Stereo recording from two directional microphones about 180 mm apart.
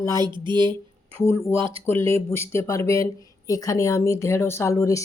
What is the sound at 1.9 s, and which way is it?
Speech, 15° left (ahead or behind).